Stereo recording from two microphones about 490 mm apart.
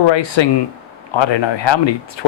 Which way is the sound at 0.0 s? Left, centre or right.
Left.